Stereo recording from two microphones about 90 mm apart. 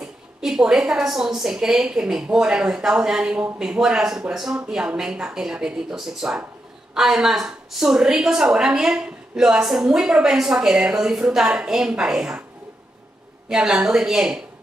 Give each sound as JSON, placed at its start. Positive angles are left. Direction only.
{"t": 0.0, "sound": "a woman's voice", "side_deg": -5}
{"t": 13.5, "sound": "a woman's voice", "side_deg": -10}